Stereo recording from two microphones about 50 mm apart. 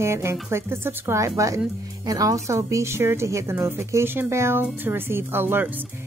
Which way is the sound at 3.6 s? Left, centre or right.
Right.